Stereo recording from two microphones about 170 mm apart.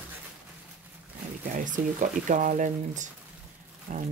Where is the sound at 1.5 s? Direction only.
50° right (ahead or behind).